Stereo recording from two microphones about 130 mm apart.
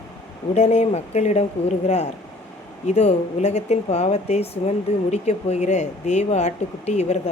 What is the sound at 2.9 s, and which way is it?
Speech, 55° left (ahead or behind).